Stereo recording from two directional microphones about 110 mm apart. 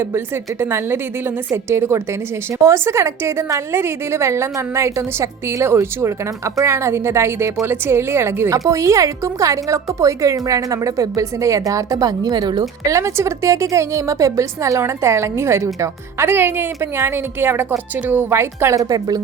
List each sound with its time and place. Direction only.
0.6 s a woman's voice: 20° right (ahead or behind)